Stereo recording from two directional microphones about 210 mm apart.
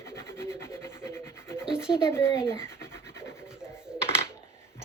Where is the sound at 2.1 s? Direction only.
10° left (ahead or behind).